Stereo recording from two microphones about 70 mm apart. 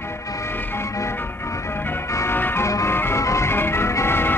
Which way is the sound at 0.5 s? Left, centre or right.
Left.